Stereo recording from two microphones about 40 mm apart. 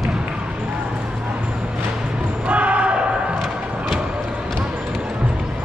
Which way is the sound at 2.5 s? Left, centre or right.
Right.